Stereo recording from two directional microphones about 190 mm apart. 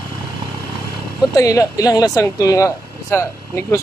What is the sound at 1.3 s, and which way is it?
Speech, 20° left (ahead or behind).